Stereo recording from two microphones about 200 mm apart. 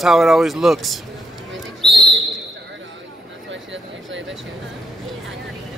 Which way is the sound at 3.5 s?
65° right (ahead or behind).